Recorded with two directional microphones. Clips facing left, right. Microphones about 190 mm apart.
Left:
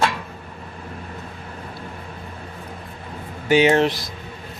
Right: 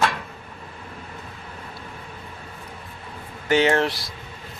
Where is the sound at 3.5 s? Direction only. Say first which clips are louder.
Left 3 dB; 15° left (ahead or behind).